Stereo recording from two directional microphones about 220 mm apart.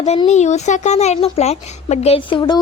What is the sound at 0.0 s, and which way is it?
Speech, 30° left (ahead or behind).